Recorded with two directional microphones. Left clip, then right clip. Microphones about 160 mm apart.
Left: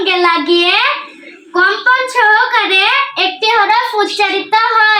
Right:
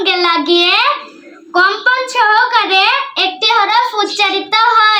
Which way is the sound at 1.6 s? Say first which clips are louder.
Left 1 dB; 20° right (ahead or behind).